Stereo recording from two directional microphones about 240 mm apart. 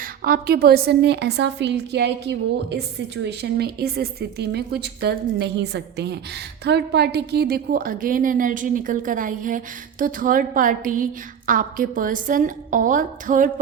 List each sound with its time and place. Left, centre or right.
0.0 s a woman's voice: right